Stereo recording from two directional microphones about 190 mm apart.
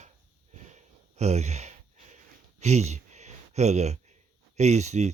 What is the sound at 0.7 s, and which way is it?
Sigh, 35° right (ahead or behind).